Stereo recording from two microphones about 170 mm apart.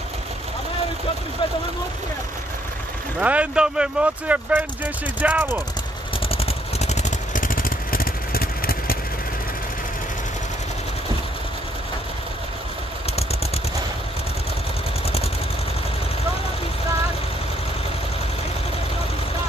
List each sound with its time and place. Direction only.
3.2 s speech: 10° right (ahead or behind)
6.2 s vehicle: 35° left (ahead or behind); by 8.9 s 60° left (ahead or behind)